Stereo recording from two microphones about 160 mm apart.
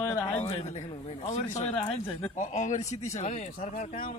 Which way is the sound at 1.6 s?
40° left (ahead or behind).